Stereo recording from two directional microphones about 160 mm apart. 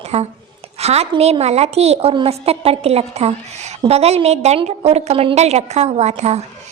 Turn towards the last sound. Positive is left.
turn(degrees=-45)  # may be behind; listen again after turning